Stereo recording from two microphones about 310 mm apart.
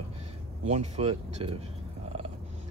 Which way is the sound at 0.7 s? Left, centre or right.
Centre.